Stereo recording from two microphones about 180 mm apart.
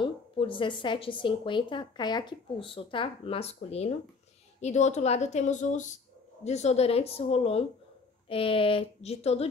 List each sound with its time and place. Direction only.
0.0 s a woman's voice: 25° left (ahead or behind)